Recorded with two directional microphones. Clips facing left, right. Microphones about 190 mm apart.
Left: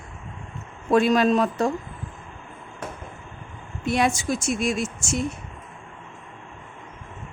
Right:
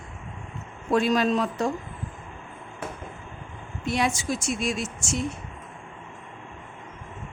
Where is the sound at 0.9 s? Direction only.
60° left (ahead or behind).